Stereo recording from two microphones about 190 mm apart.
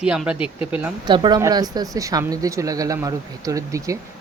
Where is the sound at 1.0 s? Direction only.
25° right (ahead or behind).